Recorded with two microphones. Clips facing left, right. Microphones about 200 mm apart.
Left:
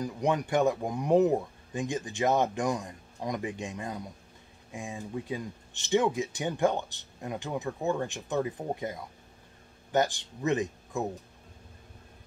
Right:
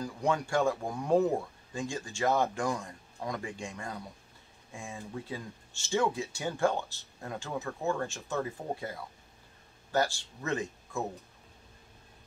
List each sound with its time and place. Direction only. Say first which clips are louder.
0.0 s speech: left 2 dB; 20° left (ahead or behind)